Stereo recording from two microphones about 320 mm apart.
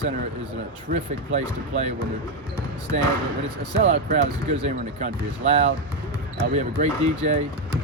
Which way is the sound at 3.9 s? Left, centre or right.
Right.